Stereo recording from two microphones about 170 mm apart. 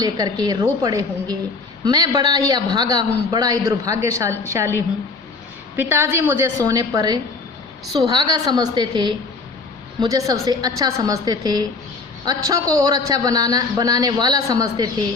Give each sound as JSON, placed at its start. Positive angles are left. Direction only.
{"t": 0.0, "sound": "a man's voice", "side_deg": -25}
{"t": 5.7, "sound": "a woman's voice", "side_deg": -10}